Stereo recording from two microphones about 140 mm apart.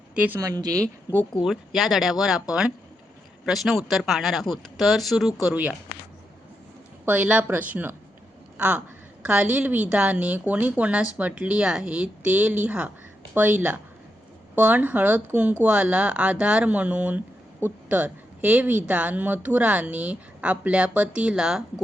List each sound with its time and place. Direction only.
0.2 s speech: 15° right (ahead or behind)
0.4 s speech: 25° right (ahead or behind)
1.1 s speech: 15° right (ahead or behind)
1.5 s speech: centre (ahead or behind)
7.0 s speech: 10° right (ahead or behind)